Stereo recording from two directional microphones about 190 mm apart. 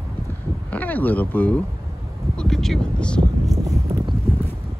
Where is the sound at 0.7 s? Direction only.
10° left (ahead or behind).